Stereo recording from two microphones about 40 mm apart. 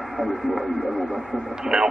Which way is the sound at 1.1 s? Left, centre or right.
Centre.